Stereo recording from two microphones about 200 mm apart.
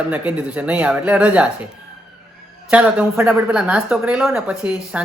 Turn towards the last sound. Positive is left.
turn(degrees=-5)  # may be behind; listen again after turning